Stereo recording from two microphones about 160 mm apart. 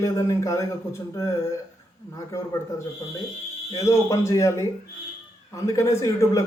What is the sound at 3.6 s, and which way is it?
A man's voice, 20° left (ahead or behind).